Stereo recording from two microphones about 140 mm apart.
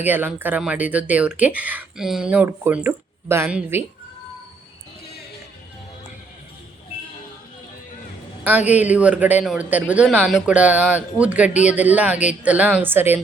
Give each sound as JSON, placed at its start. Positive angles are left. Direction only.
{"t": 0.0, "sound": "speech", "side_deg": -15}
{"t": 8.4, "sound": "speech", "side_deg": -10}